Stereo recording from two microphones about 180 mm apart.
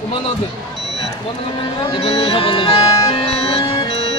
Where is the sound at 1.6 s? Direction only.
25° left (ahead or behind).